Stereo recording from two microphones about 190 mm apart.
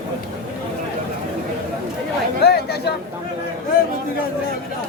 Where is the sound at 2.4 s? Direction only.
60° left (ahead or behind).